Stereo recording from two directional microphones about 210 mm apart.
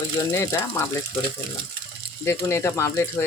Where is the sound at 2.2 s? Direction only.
10° left (ahead or behind).